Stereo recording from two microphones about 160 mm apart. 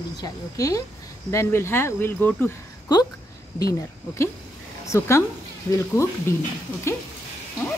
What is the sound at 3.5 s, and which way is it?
Speech, 20° left (ahead or behind).